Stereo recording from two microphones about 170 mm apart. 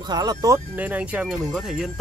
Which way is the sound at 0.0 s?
25° right (ahead or behind).